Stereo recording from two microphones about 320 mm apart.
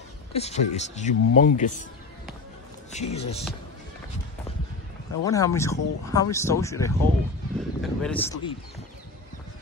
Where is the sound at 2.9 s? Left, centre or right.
Left.